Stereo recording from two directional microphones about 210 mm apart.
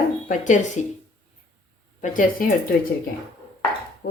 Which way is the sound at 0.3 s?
35° left (ahead or behind).